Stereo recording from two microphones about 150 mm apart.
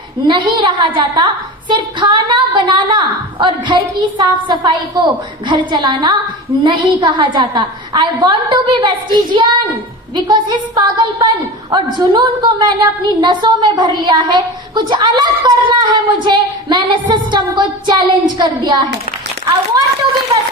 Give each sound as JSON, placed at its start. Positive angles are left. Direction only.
{"t": 0.3, "sound": "a woman's voice", "side_deg": -30}
{"t": 10.2, "sound": "a woman's voice", "side_deg": -30}